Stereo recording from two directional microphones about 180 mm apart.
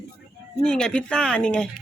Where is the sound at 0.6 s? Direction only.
5° left (ahead or behind).